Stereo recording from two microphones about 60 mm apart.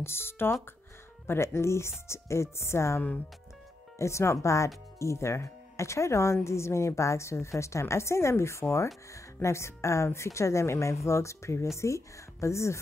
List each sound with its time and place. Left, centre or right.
0.0 s speech: left
4.0 s speech: left